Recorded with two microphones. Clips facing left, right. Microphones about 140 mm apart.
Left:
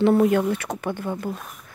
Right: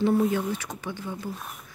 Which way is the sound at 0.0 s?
70° left (ahead or behind).